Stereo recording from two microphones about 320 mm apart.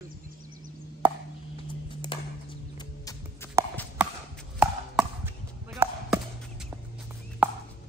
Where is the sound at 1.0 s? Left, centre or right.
Centre.